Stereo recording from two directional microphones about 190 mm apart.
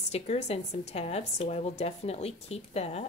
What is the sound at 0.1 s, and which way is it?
Speech, 35° left (ahead or behind).